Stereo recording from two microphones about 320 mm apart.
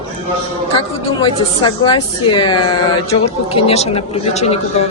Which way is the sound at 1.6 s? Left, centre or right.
Centre.